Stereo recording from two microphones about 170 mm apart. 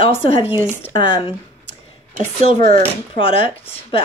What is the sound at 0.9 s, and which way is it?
Speech, 30° left (ahead or behind).